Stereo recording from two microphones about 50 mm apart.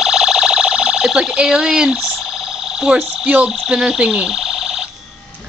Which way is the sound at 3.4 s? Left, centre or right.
Centre.